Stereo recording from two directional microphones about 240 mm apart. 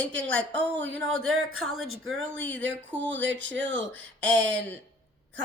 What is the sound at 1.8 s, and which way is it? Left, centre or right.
Speech, right.